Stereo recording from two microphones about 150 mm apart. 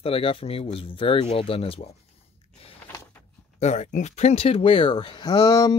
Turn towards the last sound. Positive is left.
turn(degrees=25)  # may be behind; listen again after turning